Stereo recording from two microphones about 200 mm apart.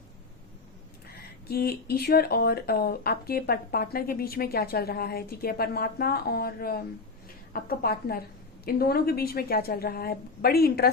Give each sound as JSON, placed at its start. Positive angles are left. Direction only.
{"t": 1.0, "sound": "speech", "side_deg": 50}